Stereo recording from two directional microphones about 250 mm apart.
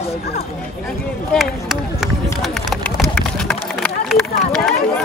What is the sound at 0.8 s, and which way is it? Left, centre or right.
Speech, centre.